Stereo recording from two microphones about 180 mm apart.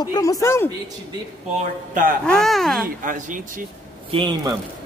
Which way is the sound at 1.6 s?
50° right (ahead or behind).